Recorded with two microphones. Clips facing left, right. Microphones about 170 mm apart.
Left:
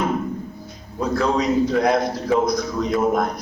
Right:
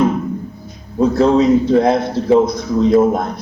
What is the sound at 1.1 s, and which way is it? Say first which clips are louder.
A man's voice: right 7 dB; 30° right (ahead or behind).